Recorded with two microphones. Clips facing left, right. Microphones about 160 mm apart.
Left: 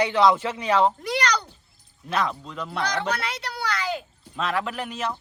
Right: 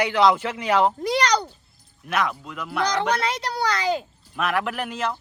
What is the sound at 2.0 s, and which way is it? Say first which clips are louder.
Speech: right 1 dB; 30° left (ahead or behind).